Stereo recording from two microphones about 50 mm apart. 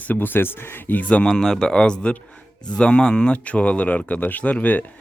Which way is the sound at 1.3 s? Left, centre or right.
Centre.